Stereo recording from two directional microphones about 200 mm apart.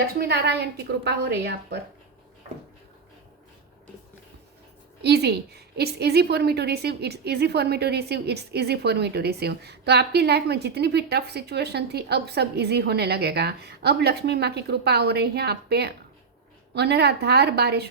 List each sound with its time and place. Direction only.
0.2 s a woman's voice: 55° right (ahead or behind)
5.0 s a woman's voice: 55° right (ahead or behind)